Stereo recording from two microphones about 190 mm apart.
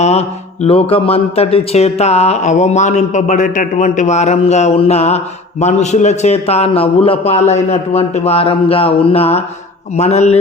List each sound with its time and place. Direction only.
0.0 s speech: 35° left (ahead or behind)
8.7 s a sound: 30° left (ahead or behind)
9.9 s speech: 35° left (ahead or behind)